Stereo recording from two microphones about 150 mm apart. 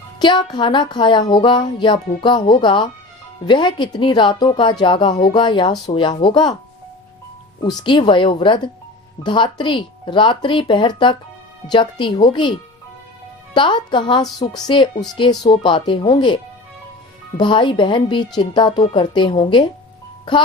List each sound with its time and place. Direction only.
0.2 s speech: 30° left (ahead or behind)
7.6 s speech: 30° left (ahead or behind)